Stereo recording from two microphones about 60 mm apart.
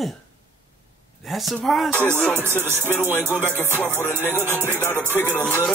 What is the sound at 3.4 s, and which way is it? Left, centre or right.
Music, left.